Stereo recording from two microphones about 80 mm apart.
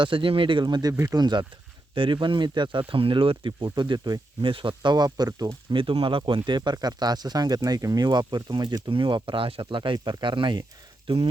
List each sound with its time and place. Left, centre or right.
0.0 s speech: right
2.0 s speech: right
6.6 s speech: right
8.0 s speech: right